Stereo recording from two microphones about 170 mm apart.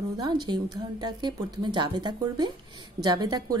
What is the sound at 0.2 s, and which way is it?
A woman's voice, 25° right (ahead or behind).